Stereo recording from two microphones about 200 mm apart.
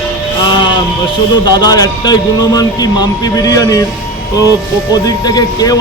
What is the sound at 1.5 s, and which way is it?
Speech, 20° left (ahead or behind).